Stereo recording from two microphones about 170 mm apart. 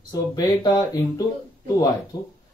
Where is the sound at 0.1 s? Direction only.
20° left (ahead or behind).